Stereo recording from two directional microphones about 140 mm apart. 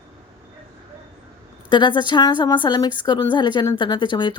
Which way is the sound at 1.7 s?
35° left (ahead or behind).